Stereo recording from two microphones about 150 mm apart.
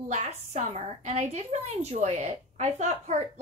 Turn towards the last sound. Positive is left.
turn(degrees=-50)  # may be behind; listen again after turning